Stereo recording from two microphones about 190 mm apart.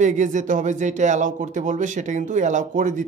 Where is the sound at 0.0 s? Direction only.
40° right (ahead or behind).